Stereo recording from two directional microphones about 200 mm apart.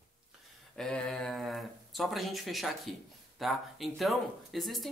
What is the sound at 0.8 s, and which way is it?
Speech, 5° left (ahead or behind).